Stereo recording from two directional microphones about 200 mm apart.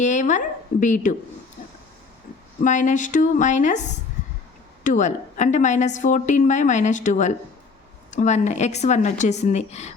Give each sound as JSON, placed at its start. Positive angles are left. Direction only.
{"t": 0.0, "sound": "speech", "side_deg": 40}
{"t": 2.6, "sound": "a woman's voice", "side_deg": 40}